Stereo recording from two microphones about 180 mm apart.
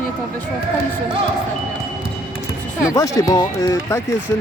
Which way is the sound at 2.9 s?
15° left (ahead or behind).